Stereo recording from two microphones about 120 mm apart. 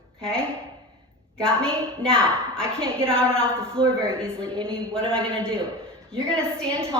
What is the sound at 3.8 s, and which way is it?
Speech, 45° right (ahead or behind).